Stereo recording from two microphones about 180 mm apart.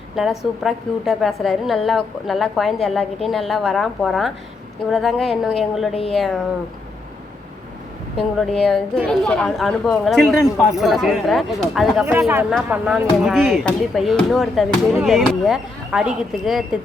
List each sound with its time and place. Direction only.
0.2 s a woman's voice: centre (ahead or behind)
5.9 s speech: 30° left (ahead or behind)
6.1 s a woman's voice: centre (ahead or behind)
8.4 s a woman's voice: centre (ahead or behind)